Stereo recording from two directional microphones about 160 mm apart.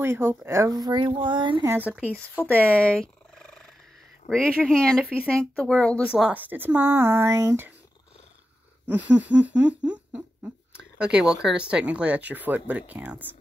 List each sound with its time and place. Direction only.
0.0 s speech: 15° right (ahead or behind); by 1.7 s 30° right (ahead or behind)
1.7 s speech: 10° right (ahead or behind)
2.3 s purr: 10° left (ahead or behind)
4.2 s speech: 50° left (ahead or behind)
4.6 s speech: 5° left (ahead or behind)
6.0 s speech: 5° right (ahead or behind)
8.8 s a sound: 10° right (ahead or behind)
9.5 s speech: 10° right (ahead or behind)